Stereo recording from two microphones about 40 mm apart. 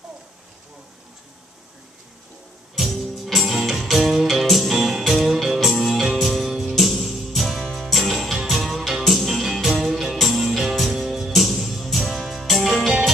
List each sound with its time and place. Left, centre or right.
2.7 s music: centre